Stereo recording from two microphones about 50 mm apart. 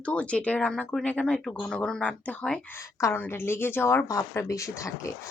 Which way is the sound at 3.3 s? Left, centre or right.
Left.